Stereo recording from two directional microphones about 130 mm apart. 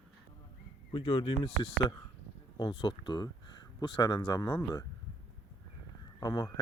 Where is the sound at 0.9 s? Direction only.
35° left (ahead or behind).